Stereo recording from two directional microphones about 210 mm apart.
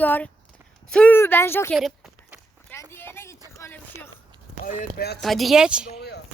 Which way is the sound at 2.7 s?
10° left (ahead or behind).